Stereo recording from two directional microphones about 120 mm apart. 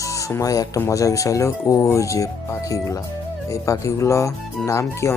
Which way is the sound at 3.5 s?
25° left (ahead or behind).